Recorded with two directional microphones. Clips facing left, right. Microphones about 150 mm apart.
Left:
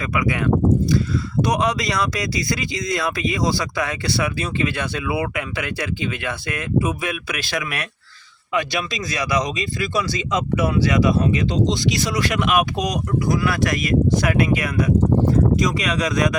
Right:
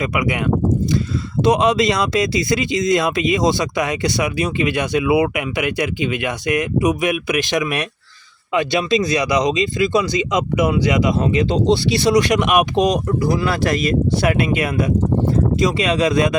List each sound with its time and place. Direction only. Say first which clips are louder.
0.0 s speech: right 2 dB; 20° right (ahead or behind)